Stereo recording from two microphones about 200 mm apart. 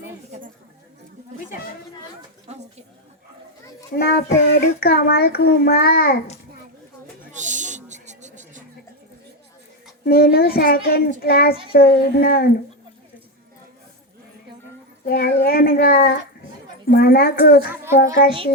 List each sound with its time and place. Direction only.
3.9 s a child's voice: 50° left (ahead or behind)
7.3 s a sound: 40° right (ahead or behind)
10.1 s a child's voice: 50° left (ahead or behind)
15.0 s a child's voice: 50° left (ahead or behind)